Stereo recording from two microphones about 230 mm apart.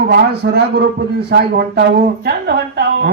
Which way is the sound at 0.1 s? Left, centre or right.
Right.